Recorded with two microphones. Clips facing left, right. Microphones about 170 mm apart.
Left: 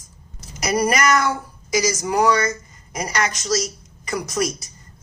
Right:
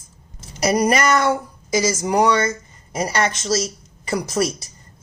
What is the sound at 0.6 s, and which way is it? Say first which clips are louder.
A woman's voice: right 2 dB; 25° right (ahead or behind).